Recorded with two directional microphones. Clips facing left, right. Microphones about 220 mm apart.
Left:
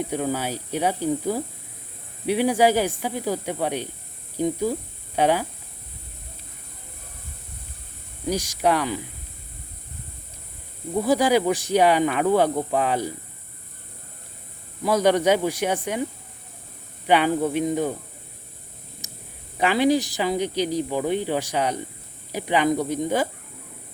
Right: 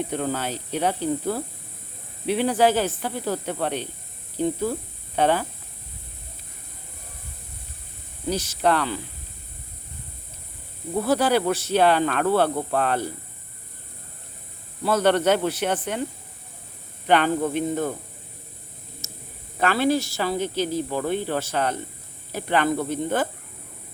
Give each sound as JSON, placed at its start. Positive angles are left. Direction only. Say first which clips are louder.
{"t": 0.0, "sound": "speech", "louder": "left 1 dB", "side_deg": 10}
{"t": 8.3, "sound": "speech", "louder": "even", "side_deg": 10}
{"t": 10.9, "sound": "speech", "louder": "left 1 dB", "side_deg": 15}
{"t": 14.8, "sound": "speech", "louder": "left 1 dB", "side_deg": 10}
{"t": 17.1, "sound": "speech", "louder": "left 1 dB", "side_deg": 10}
{"t": 19.0, "sound": "a sound", "louder": "right 2 dB", "side_deg": 15}
{"t": 19.5, "sound": "speech", "louder": "left 2 dB", "side_deg": 15}